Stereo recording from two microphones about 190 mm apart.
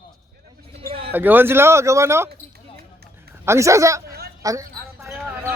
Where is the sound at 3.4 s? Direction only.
15° right (ahead or behind).